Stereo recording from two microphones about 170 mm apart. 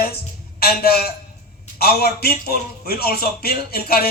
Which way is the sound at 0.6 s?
65° left (ahead or behind).